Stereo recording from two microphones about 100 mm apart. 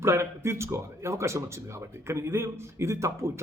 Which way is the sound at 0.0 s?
25° right (ahead or behind).